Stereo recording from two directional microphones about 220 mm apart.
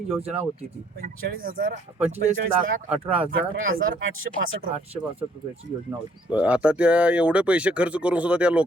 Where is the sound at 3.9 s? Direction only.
65° right (ahead or behind).